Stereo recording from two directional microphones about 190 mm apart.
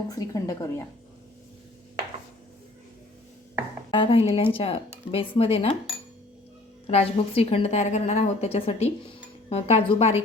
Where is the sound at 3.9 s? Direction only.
25° left (ahead or behind).